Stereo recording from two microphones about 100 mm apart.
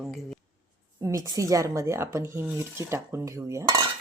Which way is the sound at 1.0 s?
35° right (ahead or behind).